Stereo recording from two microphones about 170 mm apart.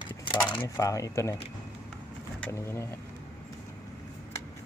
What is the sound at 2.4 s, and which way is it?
Speech, 15° left (ahead or behind).